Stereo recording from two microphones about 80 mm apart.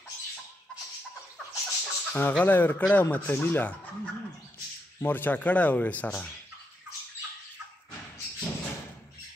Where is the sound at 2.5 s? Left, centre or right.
Left.